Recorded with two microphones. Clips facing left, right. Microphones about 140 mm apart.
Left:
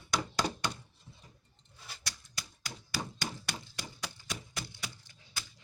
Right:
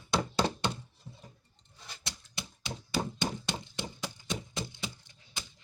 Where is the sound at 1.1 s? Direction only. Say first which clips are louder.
Right 7 dB; 50° right (ahead or behind).